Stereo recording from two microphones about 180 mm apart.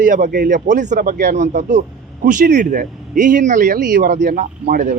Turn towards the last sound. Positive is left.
turn(degrees=-55)  # may be behind; listen again after turning